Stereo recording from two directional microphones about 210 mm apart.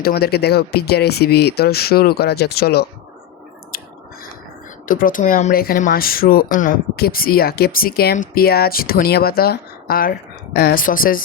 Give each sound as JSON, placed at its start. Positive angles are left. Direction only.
{"t": 0.0, "sound": "speech", "side_deg": 45}
{"t": 4.9, "sound": "speech", "side_deg": 40}